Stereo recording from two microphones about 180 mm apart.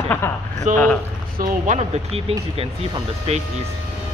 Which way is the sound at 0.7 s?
45° right (ahead or behind).